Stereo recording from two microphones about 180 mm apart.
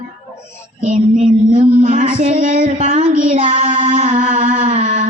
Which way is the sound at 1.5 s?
45° right (ahead or behind).